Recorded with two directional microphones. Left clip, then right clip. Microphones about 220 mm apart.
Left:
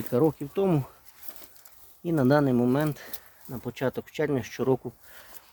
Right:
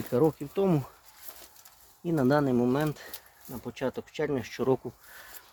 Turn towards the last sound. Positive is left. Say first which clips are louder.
# left 2 dB
turn(degrees=15)  # may be behind; listen again after turning